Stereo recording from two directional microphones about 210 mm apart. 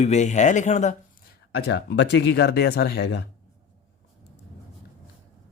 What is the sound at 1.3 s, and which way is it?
Speech, 50° left (ahead or behind).